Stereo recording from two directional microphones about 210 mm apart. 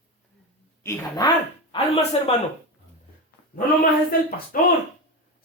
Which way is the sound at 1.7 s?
30° left (ahead or behind).